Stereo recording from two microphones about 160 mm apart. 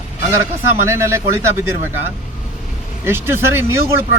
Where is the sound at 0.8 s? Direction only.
15° right (ahead or behind).